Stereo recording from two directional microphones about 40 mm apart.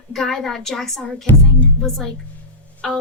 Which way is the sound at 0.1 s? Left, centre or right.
Centre.